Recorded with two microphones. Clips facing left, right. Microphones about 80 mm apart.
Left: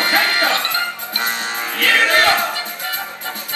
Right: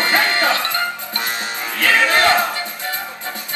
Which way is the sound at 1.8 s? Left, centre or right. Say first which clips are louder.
Even; right.